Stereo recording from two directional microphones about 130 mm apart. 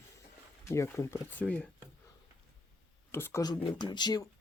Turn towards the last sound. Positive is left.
turn(degrees=35)  # may be behind; listen again after turning